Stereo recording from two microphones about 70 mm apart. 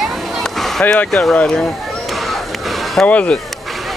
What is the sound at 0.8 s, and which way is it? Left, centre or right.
Speech, left.